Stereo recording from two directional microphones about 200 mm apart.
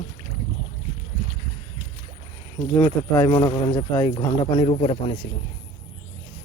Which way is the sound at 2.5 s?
20° left (ahead or behind).